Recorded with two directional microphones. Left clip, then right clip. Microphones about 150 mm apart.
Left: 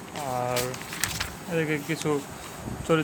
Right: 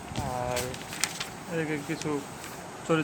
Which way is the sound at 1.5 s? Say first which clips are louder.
Left 4 dB; 30° left (ahead or behind).